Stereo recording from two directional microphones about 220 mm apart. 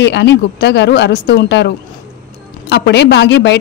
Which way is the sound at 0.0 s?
55° left (ahead or behind).